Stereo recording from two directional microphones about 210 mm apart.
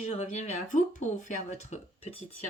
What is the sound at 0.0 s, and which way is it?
Speech, 30° left (ahead or behind).